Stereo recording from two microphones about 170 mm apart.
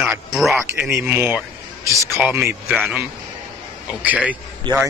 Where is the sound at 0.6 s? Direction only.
15° right (ahead or behind).